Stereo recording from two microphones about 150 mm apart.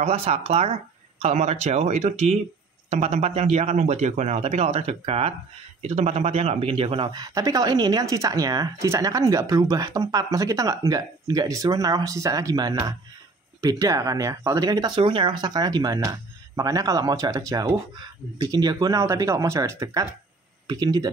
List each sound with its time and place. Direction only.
0.0 s speech: 45° right (ahead or behind)
7.1 s speech: 25° right (ahead or behind)